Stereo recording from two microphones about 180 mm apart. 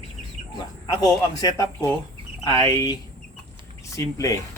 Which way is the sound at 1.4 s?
20° left (ahead or behind).